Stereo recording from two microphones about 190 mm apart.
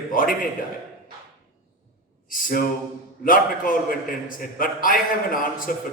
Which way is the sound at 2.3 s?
45° left (ahead or behind).